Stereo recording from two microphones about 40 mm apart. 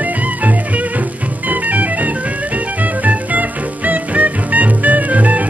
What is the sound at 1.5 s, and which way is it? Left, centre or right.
Music, right.